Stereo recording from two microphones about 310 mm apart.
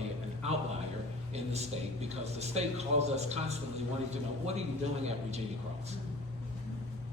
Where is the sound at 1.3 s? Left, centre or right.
Right.